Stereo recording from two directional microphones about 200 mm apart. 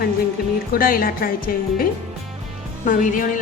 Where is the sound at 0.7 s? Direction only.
45° left (ahead or behind).